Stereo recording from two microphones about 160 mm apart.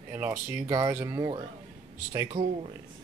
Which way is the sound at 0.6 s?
20° right (ahead or behind).